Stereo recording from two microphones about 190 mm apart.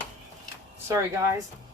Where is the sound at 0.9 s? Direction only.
15° right (ahead or behind).